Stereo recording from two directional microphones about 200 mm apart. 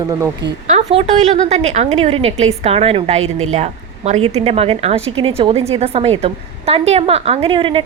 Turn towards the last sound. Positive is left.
turn(degrees=-25)  # may be behind; listen again after turning